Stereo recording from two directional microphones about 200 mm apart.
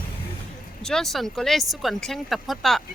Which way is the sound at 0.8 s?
Centre (ahead or behind).